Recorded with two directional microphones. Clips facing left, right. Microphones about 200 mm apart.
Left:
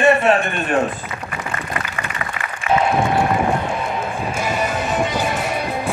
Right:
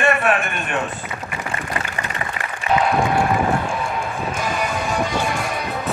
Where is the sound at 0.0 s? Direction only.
25° left (ahead or behind).